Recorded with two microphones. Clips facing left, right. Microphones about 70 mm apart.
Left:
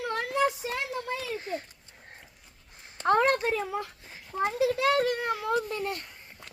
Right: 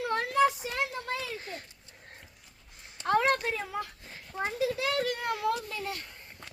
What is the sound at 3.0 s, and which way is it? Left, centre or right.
Speech, left.